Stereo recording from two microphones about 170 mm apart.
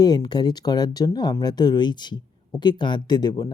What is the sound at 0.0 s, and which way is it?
Speech, 25° left (ahead or behind).